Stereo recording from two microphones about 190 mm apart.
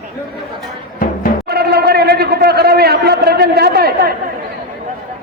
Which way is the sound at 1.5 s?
60° right (ahead or behind).